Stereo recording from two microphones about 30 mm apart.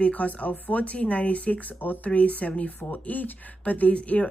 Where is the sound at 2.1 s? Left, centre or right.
Left.